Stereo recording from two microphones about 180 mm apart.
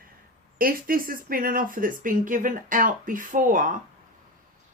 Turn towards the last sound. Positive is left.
turn(degrees=-50)  # may be behind; listen again after turning